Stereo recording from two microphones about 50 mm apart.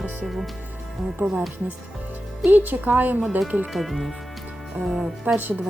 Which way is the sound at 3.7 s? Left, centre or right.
Centre.